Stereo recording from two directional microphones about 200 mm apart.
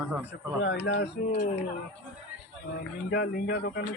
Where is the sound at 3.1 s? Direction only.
50° left (ahead or behind).